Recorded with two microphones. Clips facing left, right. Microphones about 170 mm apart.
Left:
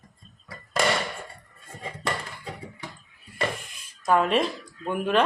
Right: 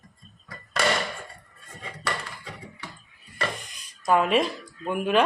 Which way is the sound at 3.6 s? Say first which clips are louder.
Even; centre (ahead or behind).